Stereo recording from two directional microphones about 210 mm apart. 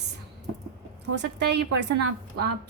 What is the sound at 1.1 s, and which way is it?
Speech, 55° right (ahead or behind).